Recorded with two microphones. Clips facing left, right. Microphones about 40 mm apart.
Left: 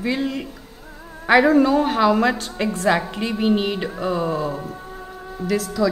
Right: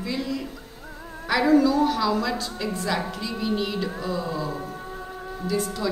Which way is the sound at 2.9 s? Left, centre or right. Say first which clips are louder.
Left 10 dB; left.